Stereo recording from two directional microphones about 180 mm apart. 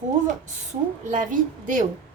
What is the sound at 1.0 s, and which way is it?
Speech, 45° right (ahead or behind).